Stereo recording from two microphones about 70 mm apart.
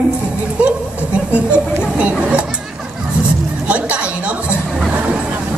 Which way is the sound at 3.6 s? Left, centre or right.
Centre.